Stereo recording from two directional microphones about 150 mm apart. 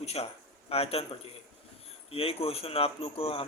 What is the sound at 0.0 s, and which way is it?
Speech, 40° left (ahead or behind).